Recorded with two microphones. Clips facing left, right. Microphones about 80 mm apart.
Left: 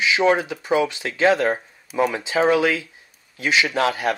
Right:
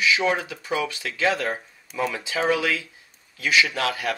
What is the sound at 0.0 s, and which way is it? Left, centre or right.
Speech, left.